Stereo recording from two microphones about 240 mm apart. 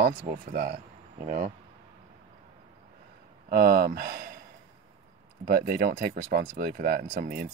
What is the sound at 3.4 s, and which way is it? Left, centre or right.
Speech, right.